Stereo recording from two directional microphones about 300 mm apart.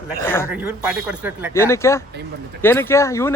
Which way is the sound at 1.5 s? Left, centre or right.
Centre.